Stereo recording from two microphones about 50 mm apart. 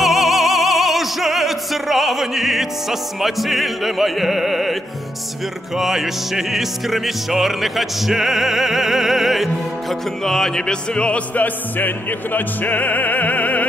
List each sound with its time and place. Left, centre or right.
0.0 s opera: centre
5.8 s music: centre
10.2 s music: centre; by 13.7 s left